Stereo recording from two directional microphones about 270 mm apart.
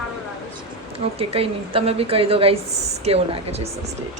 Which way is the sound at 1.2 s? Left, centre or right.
Right.